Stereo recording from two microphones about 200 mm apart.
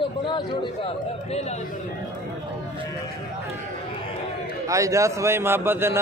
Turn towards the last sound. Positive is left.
turn(degrees=-10)  # may be behind; listen again after turning